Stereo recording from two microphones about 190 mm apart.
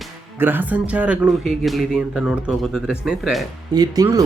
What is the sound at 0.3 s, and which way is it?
Speech, 10° right (ahead or behind).